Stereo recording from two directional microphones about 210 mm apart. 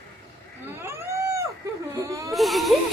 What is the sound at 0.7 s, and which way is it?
A woman's voice, 10° right (ahead or behind).